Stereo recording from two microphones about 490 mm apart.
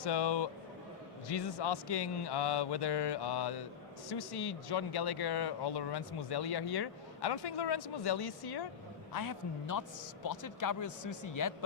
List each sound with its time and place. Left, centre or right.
0.0 s speech: left